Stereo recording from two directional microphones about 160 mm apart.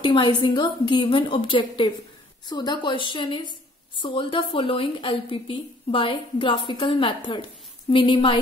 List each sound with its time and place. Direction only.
0.0 s a woman's voice: 30° left (ahead or behind)